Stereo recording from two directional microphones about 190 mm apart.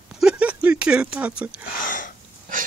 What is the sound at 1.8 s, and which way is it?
Sneeze, 45° left (ahead or behind).